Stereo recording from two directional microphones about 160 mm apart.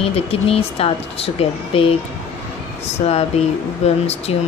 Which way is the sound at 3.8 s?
40° left (ahead or behind).